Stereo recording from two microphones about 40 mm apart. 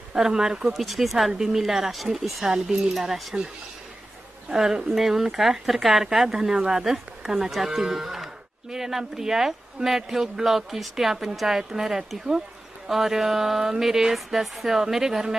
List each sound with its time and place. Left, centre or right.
0.1 s speech: centre
0.7 s speech: centre
2.5 s speech: centre
2.9 s speech: centre
4.9 s speech: centre
6.2 s speech: centre